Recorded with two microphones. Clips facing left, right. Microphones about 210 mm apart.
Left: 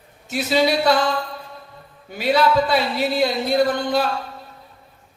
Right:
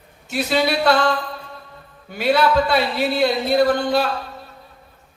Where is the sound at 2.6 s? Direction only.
60° right (ahead or behind).